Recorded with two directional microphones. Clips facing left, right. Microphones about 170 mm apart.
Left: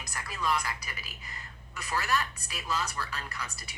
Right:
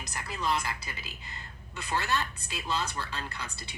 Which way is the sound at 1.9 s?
25° right (ahead or behind).